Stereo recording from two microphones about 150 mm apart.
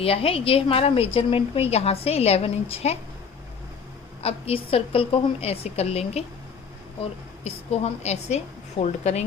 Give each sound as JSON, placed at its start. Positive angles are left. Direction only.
{"t": 0.0, "sound": "a woman's voice", "side_deg": 40}
{"t": 4.2, "sound": "a woman's voice", "side_deg": 40}
{"t": 7.4, "sound": "a woman's voice", "side_deg": 45}